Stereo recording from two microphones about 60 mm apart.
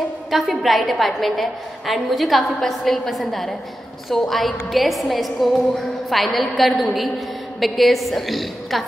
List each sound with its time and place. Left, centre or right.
0.3 s a woman's voice: centre